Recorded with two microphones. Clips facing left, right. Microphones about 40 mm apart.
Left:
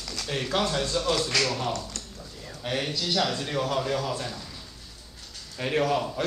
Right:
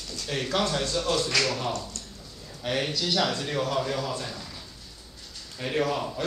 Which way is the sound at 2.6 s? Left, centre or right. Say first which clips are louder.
Right 1 dB; centre.